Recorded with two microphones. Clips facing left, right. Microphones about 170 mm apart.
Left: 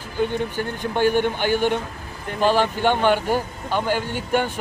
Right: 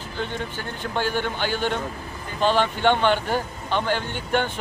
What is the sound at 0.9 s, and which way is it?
A man's voice, 15° left (ahead or behind).